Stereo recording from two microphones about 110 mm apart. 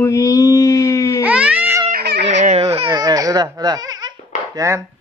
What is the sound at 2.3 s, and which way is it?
Baby cry, 90° right.